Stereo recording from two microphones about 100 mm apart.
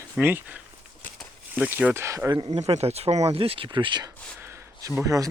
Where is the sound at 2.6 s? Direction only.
90° right; by 4.0 s 55° right (ahead or behind).